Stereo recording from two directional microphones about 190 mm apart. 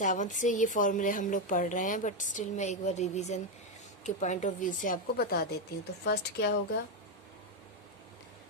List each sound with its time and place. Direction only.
0.0 s speech: 40° left (ahead or behind); by 6.6 s 60° left (ahead or behind)